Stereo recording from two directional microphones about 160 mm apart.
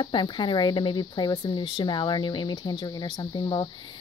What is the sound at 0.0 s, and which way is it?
Speech, 30° left (ahead or behind).